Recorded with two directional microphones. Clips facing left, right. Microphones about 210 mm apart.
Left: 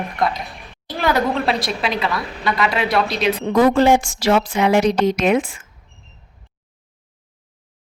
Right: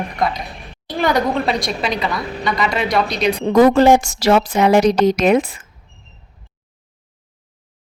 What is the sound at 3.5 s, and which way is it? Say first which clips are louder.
A woman's voice: right 3 dB; 45° right (ahead or behind).